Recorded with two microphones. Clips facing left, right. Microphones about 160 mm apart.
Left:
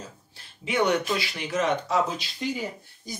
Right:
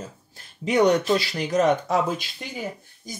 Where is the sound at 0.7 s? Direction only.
40° right (ahead or behind).